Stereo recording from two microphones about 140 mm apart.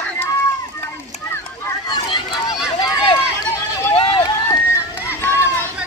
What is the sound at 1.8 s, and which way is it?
Run, 35° left (ahead or behind).